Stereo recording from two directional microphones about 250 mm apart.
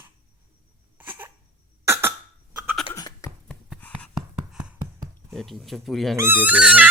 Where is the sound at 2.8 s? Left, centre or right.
Centre.